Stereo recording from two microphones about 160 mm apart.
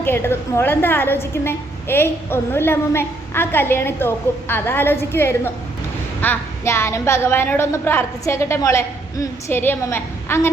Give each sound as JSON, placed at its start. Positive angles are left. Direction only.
{"t": 0.0, "sound": "a woman's voice", "side_deg": 15}